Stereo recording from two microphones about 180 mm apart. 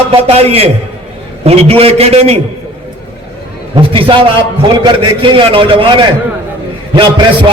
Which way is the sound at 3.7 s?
30° right (ahead or behind).